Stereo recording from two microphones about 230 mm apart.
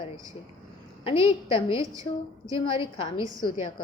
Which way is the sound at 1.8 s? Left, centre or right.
Centre.